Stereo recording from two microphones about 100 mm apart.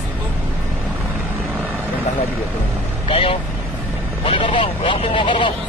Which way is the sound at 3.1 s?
65° left (ahead or behind).